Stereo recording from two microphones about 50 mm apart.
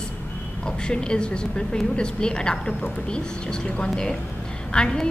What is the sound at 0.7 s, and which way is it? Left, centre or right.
A woman's voice, centre.